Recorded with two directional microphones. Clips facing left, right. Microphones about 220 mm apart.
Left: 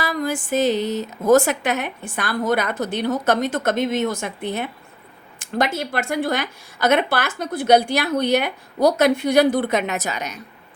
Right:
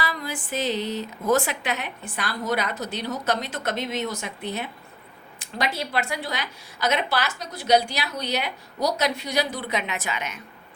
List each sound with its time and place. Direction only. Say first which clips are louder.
0.0 s a woman's voice: left 7 dB; 45° left (ahead or behind)